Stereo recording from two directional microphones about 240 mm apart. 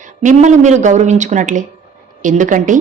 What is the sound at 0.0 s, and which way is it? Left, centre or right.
Speech, right.